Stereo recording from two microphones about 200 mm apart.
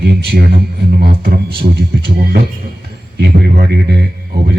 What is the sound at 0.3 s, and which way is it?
Speech, 50° right (ahead or behind).